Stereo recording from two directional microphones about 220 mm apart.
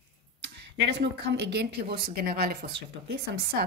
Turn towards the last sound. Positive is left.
turn(degrees=-45)  # may be behind; listen again after turning